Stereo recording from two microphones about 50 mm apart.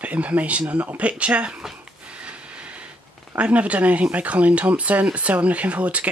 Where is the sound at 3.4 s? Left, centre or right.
Right.